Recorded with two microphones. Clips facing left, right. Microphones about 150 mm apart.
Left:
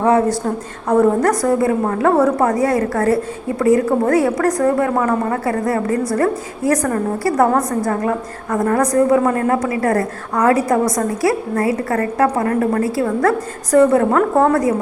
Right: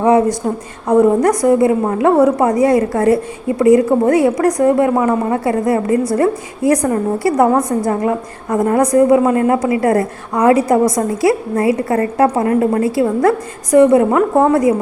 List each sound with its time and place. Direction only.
0.0 s a woman's voice: 15° right (ahead or behind)